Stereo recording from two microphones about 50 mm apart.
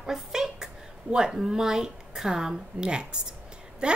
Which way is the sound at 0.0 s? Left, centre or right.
Centre.